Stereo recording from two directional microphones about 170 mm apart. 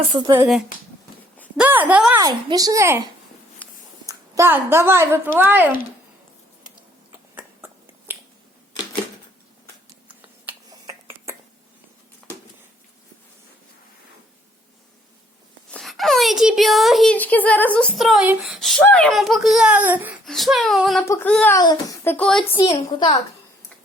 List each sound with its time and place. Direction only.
0.0 s a child's voice: 30° right (ahead or behind)
1.5 s speech: 10° right (ahead or behind)
2.1 s a child's voice: 25° right (ahead or behind)
3.6 s a sound: 10° left (ahead or behind)
4.0 s a woman's voice: 20° right (ahead or behind)
7.3 s finger snapping: 15° right (ahead or behind)
10.7 s finger snapping: 20° right (ahead or behind)
15.7 s a woman's voice: centre (ahead or behind)
18.8 s a child's voice: 10° left (ahead or behind); by 20.1 s 10° right (ahead or behind)
20.2 s a child's voice: centre (ahead or behind)
21.0 s a child's voice: 15° left (ahead or behind)
22.6 s a woman's voice: 25° left (ahead or behind)